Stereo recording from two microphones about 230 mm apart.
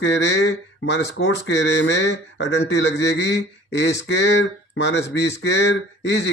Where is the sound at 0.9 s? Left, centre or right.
Left.